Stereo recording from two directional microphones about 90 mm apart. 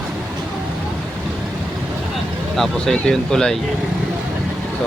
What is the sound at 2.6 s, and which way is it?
Speech, 5° left (ahead or behind).